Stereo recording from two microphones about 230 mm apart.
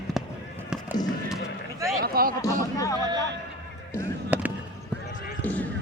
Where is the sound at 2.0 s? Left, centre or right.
Right.